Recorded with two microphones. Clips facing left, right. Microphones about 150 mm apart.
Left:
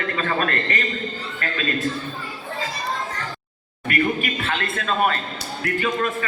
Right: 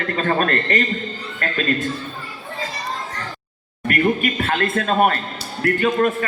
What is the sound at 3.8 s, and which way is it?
A man's voice, 50° right (ahead or behind).